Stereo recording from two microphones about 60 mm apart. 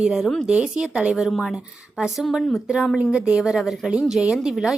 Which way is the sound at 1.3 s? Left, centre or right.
Centre.